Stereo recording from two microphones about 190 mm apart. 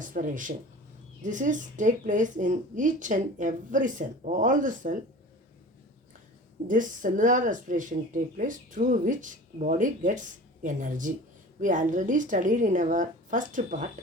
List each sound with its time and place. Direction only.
0.0 s a woman's voice: 45° right (ahead or behind)
6.7 s speech: 45° right (ahead or behind)